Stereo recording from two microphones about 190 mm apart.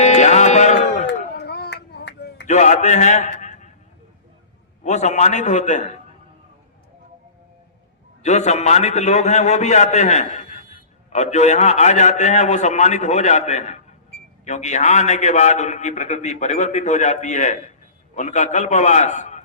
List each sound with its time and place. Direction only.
0.0 s music: 35° left (ahead or behind)
1.4 s clapping: 60° left (ahead or behind)
2.5 s a man's voice: 40° left (ahead or behind)
4.8 s a man's voice: 35° left (ahead or behind)
8.2 s a man's voice: 35° left (ahead or behind)